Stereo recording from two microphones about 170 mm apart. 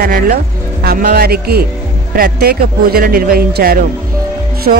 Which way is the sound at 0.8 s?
60° right (ahead or behind).